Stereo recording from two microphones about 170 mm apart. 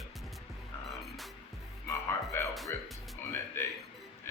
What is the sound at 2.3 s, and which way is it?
Music, 15° left (ahead or behind).